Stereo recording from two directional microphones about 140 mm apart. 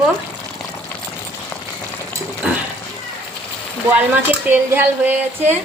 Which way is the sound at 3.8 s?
15° right (ahead or behind).